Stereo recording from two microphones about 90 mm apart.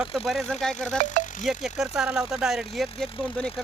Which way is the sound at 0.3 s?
Centre (ahead or behind).